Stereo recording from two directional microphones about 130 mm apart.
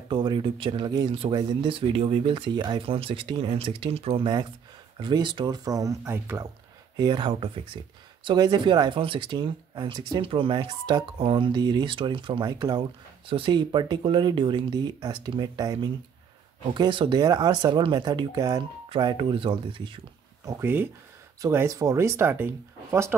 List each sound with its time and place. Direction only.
0.1 s speech: 35° right (ahead or behind)
5.0 s speech: 35° right (ahead or behind); by 6.5 s 20° right (ahead or behind)
7.0 s speech: 35° right (ahead or behind)
12.4 s speech: 30° right (ahead or behind)
16.7 s speech: 40° right (ahead or behind)
18.9 s speech: 40° right (ahead or behind)
20.4 s speech: 15° right (ahead or behind)